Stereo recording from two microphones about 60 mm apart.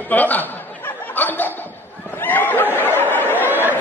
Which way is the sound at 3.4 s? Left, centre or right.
Right.